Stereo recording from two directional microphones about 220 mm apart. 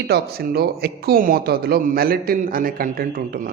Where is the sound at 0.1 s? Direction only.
45° right (ahead or behind).